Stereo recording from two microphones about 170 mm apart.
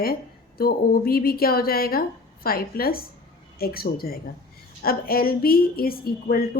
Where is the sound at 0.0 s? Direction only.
65° left (ahead or behind).